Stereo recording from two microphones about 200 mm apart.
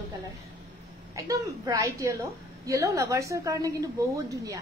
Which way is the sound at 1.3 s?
15° right (ahead or behind).